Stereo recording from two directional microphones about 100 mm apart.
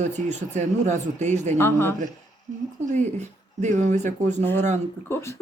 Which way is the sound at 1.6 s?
25° left (ahead or behind).